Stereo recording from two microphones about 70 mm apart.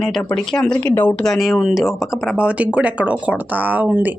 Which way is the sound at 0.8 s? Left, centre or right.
Left.